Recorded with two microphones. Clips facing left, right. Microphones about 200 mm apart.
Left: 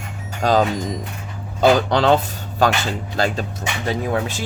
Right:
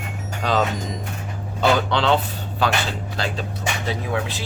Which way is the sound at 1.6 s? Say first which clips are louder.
Left 4 dB; 45° left (ahead or behind).